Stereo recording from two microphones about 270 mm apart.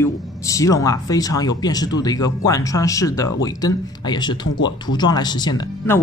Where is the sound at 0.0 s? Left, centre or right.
Centre.